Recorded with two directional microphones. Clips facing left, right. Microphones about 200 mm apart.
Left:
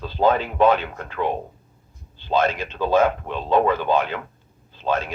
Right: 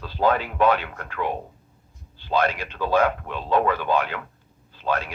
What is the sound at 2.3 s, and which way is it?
A man's voice, 25° left (ahead or behind).